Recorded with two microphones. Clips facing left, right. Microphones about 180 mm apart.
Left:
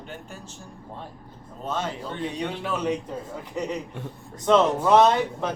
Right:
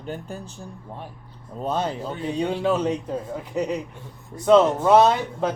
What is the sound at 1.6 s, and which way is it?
Speech, 35° right (ahead or behind).